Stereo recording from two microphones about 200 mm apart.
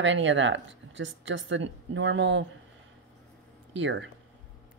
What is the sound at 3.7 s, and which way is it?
Speech, 65° right (ahead or behind).